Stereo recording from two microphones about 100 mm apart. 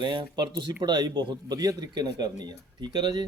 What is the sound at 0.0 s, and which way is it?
Speech, 55° right (ahead or behind).